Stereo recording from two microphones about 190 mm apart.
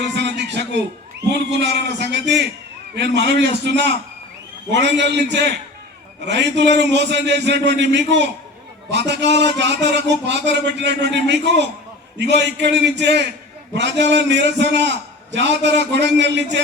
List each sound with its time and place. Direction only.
0.2 s music: 65° right (ahead or behind)
1.3 s a man's voice: 65° right (ahead or behind)